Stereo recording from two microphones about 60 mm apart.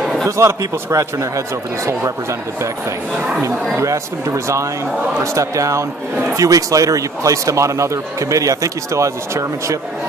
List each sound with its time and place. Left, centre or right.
0.0 s a sound: centre
0.4 s a man's voice: right
3.8 s a man's voice: right
6.3 s a man's voice: right